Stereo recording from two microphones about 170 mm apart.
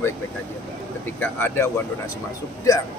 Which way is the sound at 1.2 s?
10° left (ahead or behind).